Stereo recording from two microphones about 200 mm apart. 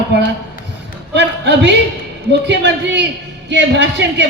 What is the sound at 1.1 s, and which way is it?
A woman's voice, 60° right (ahead or behind).